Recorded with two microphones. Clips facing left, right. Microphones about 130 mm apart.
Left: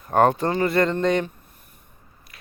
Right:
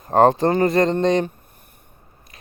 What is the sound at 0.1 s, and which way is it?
Speech, 30° right (ahead or behind).